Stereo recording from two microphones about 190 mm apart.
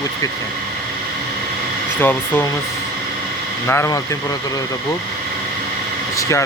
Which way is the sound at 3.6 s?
15° left (ahead or behind).